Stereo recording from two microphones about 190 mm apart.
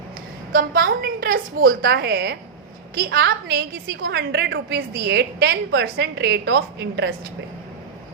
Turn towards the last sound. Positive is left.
turn(degrees=-65)  # may be behind; listen again after turning